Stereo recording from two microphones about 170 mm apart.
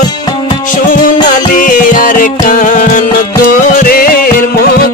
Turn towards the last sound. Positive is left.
turn(degrees=60)  # may be behind; listen again after turning